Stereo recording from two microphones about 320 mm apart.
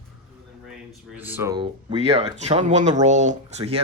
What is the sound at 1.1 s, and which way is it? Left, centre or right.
Speech, centre.